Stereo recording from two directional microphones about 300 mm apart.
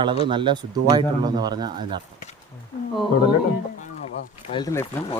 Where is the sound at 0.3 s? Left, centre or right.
Centre.